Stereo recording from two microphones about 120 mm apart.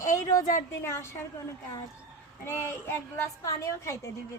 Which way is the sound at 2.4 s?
20° left (ahead or behind).